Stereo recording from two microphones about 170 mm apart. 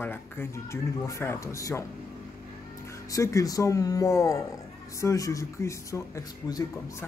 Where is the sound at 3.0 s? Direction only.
20° left (ahead or behind).